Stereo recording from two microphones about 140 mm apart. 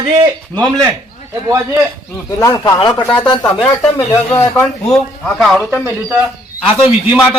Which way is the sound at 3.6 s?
Centre (ahead or behind).